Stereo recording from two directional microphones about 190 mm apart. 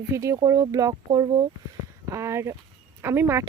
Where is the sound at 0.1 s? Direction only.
15° right (ahead or behind).